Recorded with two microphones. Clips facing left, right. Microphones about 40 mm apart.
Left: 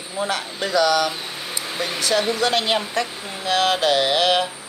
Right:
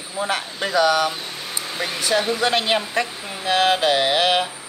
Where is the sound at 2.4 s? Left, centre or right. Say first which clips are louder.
Even; centre.